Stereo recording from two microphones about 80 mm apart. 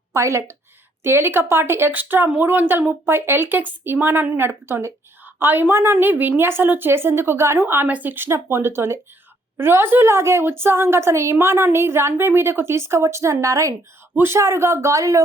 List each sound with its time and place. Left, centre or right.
0.1 s a woman's voice: right
7.9 s a woman's voice: right